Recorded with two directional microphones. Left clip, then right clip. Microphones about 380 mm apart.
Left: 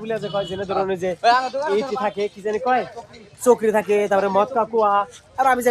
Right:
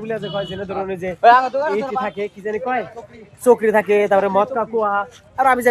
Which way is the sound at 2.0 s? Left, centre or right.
Centre.